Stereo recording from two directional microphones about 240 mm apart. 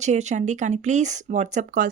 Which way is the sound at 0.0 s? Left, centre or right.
Right.